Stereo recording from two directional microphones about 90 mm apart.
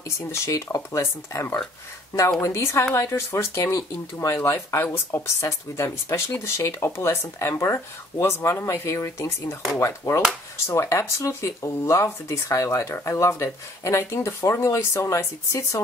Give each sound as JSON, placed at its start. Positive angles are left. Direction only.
{"t": 0.3, "sound": "speech", "side_deg": 35}